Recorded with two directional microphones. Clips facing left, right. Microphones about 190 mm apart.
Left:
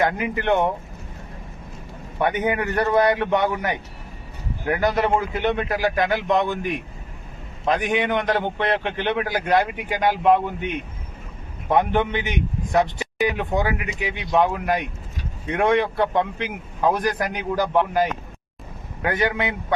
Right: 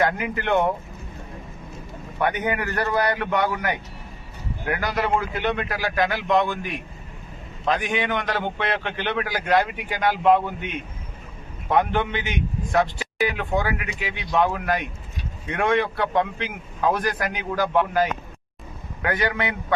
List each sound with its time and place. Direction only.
0.0 s a man's voice: 20° left (ahead or behind)
2.1 s a man's voice: 20° left (ahead or behind)
4.8 s a man's voice: 20° left (ahead or behind)
7.6 s a man's voice: 20° left (ahead or behind)
11.7 s a man's voice: 15° left (ahead or behind)